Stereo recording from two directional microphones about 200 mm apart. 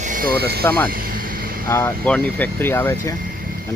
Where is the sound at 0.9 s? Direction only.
45° right (ahead or behind).